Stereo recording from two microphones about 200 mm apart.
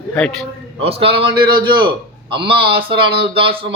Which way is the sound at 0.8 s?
30° right (ahead or behind).